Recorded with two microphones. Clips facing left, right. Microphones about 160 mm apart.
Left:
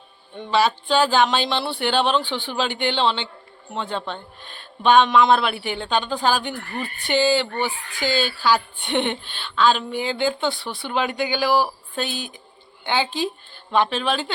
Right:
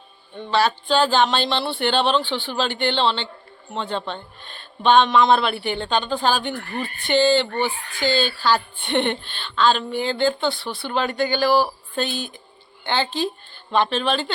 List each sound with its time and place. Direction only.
0.5 s a woman's voice: 10° left (ahead or behind)